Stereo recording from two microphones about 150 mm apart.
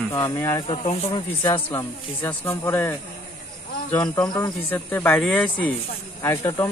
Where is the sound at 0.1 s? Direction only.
20° left (ahead or behind).